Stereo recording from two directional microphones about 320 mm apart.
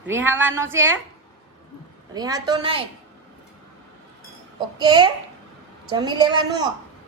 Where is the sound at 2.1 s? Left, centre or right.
Centre.